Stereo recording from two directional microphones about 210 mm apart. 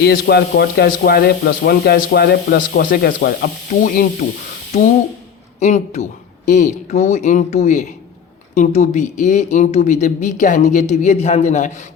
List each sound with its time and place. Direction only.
0.0 s speech: 50° left (ahead or behind)
5.5 s speech: 35° left (ahead or behind)